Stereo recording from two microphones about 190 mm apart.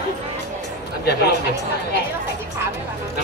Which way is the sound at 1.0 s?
60° left (ahead or behind).